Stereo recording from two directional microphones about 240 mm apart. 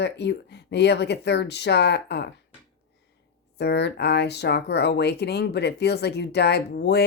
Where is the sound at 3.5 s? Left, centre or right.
Left.